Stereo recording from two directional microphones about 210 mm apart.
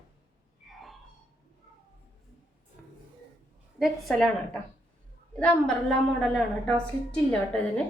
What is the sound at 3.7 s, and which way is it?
A woman's voice, centre (ahead or behind).